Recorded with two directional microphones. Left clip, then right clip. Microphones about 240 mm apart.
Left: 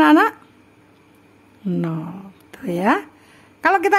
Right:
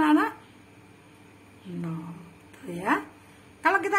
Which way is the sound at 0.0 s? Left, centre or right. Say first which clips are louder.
Left 9 dB; left.